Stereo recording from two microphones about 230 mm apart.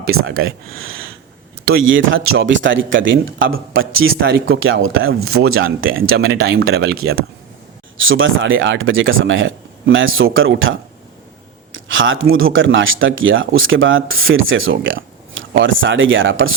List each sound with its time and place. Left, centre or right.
0.3 s speech: right
4.1 s speech: right
4.4 s speech: right
7.9 s speech: right